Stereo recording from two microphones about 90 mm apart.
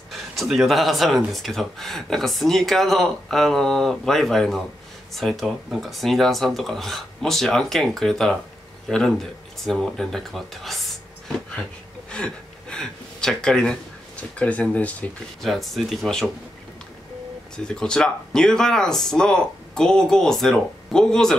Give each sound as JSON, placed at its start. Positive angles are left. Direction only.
{"t": 0.1, "sound": "speech", "side_deg": 0}
{"t": 12.1, "sound": "gasp", "side_deg": 10}
{"t": 14.4, "sound": "speech", "side_deg": 15}
{"t": 15.4, "sound": "speech", "side_deg": 0}
{"t": 17.6, "sound": "speech", "side_deg": 10}